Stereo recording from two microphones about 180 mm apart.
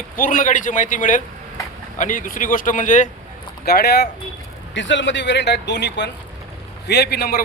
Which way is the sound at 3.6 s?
60° left (ahead or behind).